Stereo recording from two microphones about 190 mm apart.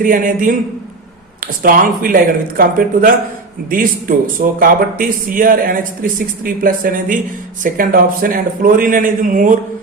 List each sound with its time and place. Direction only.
0.0 s speech: 45° right (ahead or behind)